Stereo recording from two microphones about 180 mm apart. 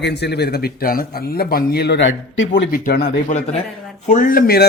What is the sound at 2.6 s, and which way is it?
Speech, 55° left (ahead or behind).